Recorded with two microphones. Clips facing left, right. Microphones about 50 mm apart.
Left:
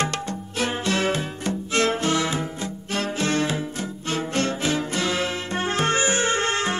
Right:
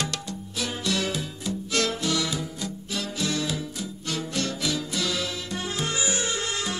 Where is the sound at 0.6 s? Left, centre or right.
Left.